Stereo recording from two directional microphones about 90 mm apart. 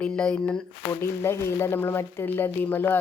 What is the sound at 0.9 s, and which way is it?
Speech, 30° left (ahead or behind).